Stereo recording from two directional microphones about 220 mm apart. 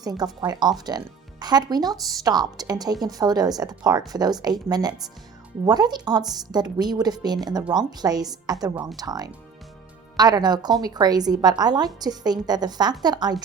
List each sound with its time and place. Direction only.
0.0 s a woman's voice: 15° right (ahead or behind)